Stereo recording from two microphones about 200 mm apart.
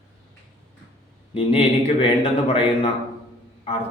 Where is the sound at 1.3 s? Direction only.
25° left (ahead or behind).